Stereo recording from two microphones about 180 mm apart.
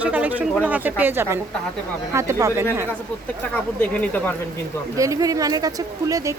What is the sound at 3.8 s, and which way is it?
Speech, 10° left (ahead or behind).